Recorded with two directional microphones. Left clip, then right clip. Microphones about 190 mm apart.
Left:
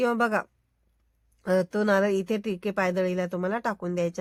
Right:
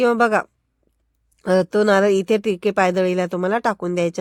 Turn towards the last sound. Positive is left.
turn(degrees=-35)  # may be behind; listen again after turning